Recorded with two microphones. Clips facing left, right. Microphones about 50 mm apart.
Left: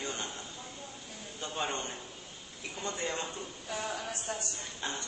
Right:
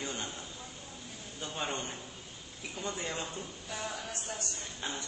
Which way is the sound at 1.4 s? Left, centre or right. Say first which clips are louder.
Left 2 dB; centre.